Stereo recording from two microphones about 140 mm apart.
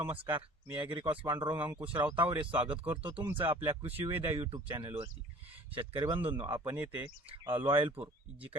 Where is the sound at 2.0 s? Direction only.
15° right (ahead or behind).